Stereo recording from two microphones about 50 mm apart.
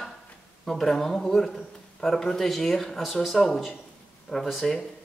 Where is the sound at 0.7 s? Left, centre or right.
Centre.